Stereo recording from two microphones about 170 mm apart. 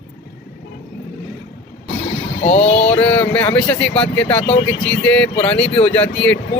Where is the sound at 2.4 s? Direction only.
40° left (ahead or behind).